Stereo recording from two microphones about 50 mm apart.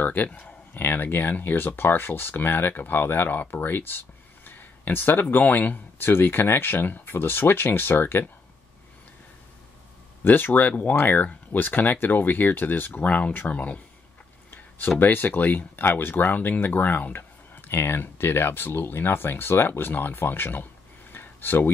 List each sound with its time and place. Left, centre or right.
0.0 s speech: left
0.7 s speech: left
4.5 s a sound: left
5.3 s speech: left
5.9 s speech: left
10.2 s speech: left
13.0 s speech: left
15.0 s speech: left
21.1 s a sound: left